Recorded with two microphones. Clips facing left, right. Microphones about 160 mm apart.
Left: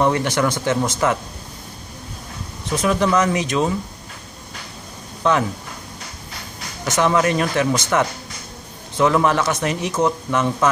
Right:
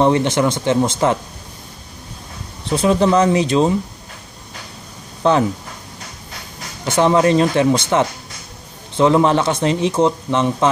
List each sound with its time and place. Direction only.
0.0 s speech: 25° right (ahead or behind)
2.7 s speech: 30° right (ahead or behind)
5.2 s speech: 30° right (ahead or behind)
6.8 s speech: 30° right (ahead or behind)